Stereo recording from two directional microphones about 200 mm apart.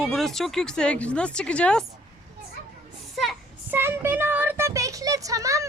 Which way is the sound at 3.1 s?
Centre (ahead or behind).